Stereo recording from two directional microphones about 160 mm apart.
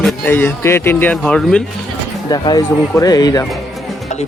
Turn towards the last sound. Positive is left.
turn(degrees=25)  # may be behind; listen again after turning